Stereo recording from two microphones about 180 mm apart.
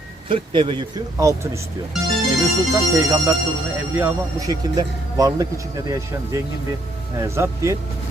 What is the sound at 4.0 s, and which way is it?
Speech, 15° right (ahead or behind).